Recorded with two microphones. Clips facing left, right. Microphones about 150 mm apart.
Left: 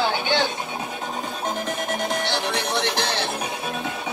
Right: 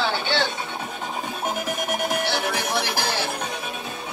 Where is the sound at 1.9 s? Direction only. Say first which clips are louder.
Right 1 dB; 10° right (ahead or behind).